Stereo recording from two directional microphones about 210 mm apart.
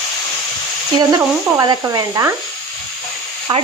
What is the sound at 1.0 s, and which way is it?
Speech, 20° right (ahead or behind).